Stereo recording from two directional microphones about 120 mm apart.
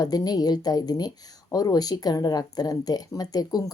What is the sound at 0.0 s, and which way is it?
Speech, 30° left (ahead or behind).